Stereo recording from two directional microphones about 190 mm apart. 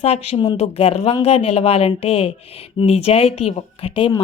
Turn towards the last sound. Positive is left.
turn(degrees=25)  # may be behind; listen again after turning